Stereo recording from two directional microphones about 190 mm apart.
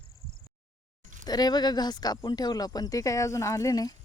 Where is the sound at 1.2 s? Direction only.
20° left (ahead or behind).